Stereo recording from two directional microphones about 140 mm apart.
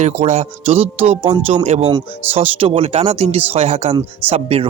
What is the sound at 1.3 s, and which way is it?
Speech, 30° right (ahead or behind).